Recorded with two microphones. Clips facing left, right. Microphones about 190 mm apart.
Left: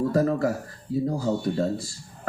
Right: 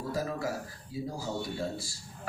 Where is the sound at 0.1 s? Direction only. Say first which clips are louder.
Left 10 dB; 60° left (ahead or behind).